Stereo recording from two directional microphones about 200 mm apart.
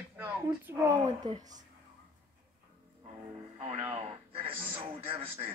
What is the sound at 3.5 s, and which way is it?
Speech, 30° right (ahead or behind).